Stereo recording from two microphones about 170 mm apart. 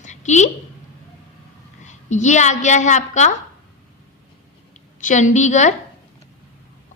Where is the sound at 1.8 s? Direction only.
45° left (ahead or behind).